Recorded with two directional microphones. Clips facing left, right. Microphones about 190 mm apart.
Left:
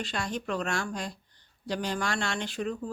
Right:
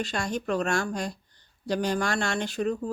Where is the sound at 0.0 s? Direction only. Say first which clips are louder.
Right 3 dB; 45° right (ahead or behind).